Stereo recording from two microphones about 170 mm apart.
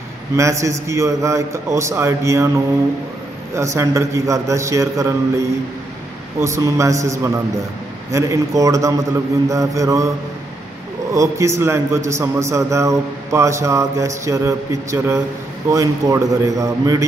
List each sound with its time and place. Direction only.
0.4 s a man's voice: 15° right (ahead or behind)
3.5 s a man's voice: 15° right (ahead or behind)
11.1 s a man's voice: 15° right (ahead or behind)